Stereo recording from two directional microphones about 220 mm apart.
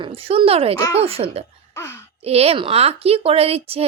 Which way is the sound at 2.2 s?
25° right (ahead or behind).